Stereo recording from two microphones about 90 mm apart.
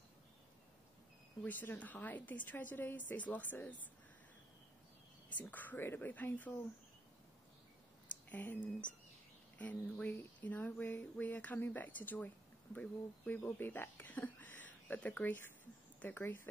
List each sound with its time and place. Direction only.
1.4 s a woman's voice: 20° left (ahead or behind)
5.4 s a woman's voice: 20° left (ahead or behind)
8.3 s a woman's voice: 20° left (ahead or behind)